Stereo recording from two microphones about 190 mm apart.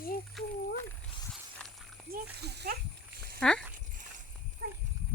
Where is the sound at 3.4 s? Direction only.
5° left (ahead or behind).